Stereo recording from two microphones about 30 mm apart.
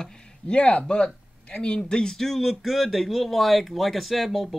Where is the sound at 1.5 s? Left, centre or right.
Left.